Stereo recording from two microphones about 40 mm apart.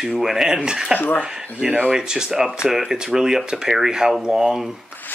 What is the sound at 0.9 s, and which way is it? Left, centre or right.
Speech, left.